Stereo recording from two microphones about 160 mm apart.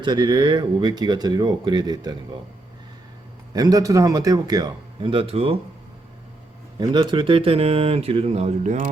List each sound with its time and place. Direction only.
0.0 s speech: 30° right (ahead or behind)
3.5 s speech: 25° right (ahead or behind)
6.7 s speech: 30° right (ahead or behind); by 8.9 s 45° right (ahead or behind)